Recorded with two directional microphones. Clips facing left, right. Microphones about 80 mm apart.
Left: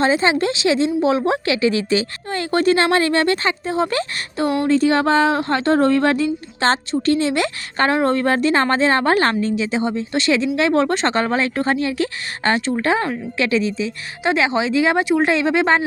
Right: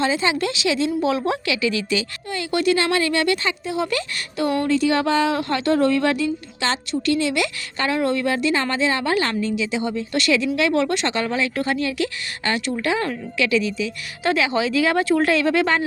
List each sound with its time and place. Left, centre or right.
0.0 s speech: left